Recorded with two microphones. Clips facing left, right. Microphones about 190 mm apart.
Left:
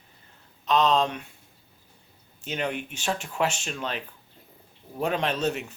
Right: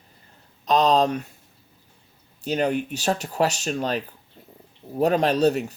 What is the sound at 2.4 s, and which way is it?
Speech, 40° right (ahead or behind).